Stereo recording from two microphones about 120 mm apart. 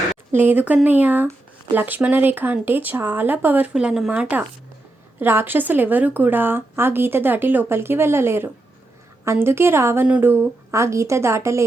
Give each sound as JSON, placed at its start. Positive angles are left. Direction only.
{"t": 0.3, "sound": "a woman's voice", "side_deg": -15}